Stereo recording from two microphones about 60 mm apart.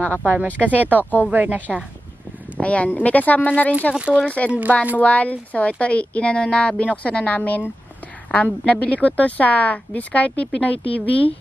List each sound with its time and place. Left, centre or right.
0.0 s speech: left
0.7 s a woman's voice: right
2.6 s a woman's voice: left
3.9 s a woman's voice: centre
4.9 s a woman's voice: left